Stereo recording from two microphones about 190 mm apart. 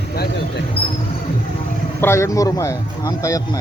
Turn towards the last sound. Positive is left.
turn(degrees=15)  # may be behind; listen again after turning